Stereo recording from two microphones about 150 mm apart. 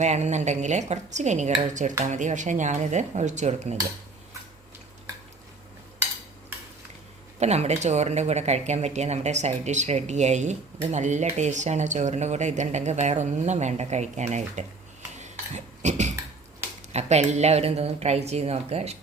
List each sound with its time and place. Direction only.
0.0 s speech: 50° right (ahead or behind)
7.3 s speech: 45° right (ahead or behind)
15.2 s cutlery: 50° right (ahead or behind)
16.9 s speech: 45° right (ahead or behind)